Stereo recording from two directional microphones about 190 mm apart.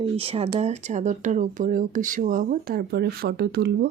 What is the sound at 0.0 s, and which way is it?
Speech, 30° right (ahead or behind).